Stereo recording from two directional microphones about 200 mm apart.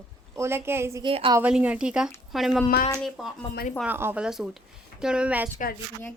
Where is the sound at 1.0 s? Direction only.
25° right (ahead or behind).